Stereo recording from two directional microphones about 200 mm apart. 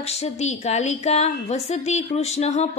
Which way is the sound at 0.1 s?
35° left (ahead or behind).